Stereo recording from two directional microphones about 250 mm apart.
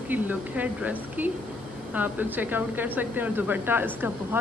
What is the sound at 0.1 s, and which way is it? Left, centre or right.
Speech, centre.